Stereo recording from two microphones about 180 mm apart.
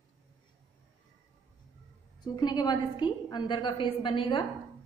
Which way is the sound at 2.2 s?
25° left (ahead or behind).